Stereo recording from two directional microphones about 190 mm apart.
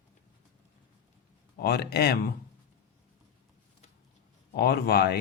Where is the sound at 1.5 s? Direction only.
55° left (ahead or behind).